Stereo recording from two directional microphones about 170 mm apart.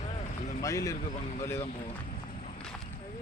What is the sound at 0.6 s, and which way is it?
Speech, 20° left (ahead or behind).